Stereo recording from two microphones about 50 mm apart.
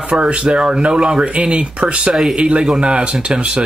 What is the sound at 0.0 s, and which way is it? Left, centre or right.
Speech, right.